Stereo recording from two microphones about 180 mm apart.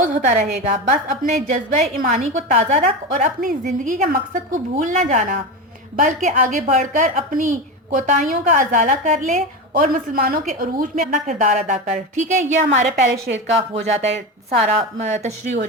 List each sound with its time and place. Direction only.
0.2 s a woman's voice: 50° right (ahead or behind)